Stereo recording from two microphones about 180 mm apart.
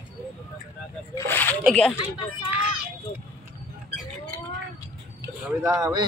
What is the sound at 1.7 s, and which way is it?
Speech, 5° left (ahead or behind).